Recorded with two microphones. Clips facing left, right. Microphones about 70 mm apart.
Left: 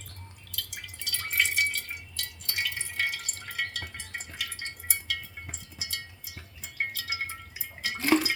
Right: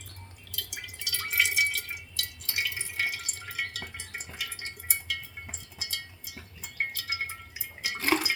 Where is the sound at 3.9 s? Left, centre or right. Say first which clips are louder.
Left 1 dB; centre.